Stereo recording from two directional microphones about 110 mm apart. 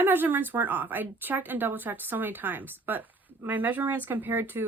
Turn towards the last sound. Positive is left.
turn(degrees=-20)  # may be behind; listen again after turning